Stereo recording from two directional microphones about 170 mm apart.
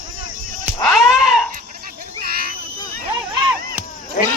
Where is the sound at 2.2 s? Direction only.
65° right (ahead or behind).